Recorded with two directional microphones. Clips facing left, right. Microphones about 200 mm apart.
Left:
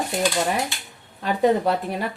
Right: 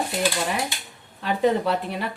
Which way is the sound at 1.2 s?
45° left (ahead or behind).